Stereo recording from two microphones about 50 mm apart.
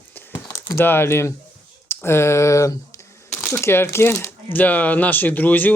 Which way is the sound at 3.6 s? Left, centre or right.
Left.